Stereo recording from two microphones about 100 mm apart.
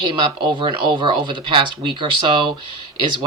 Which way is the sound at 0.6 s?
55° right (ahead or behind).